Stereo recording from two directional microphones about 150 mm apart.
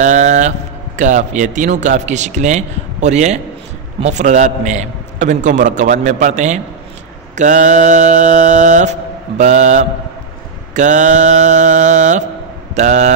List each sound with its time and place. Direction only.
0.0 s a man's voice: 55° right (ahead or behind)
7.3 s mantra: 55° right (ahead or behind)
9.4 s a man's voice: 50° right (ahead or behind)
10.7 s mantra: 55° right (ahead or behind)
12.7 s a man's voice: 50° right (ahead or behind)